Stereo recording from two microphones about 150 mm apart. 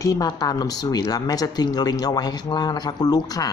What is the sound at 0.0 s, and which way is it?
Speech, 25° left (ahead or behind).